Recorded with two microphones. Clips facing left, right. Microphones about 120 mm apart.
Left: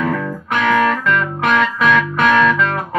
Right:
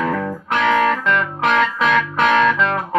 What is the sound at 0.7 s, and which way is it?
Music, 20° right (ahead or behind).